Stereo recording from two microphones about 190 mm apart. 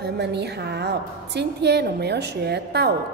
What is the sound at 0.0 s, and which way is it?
A woman's voice, 60° right (ahead or behind).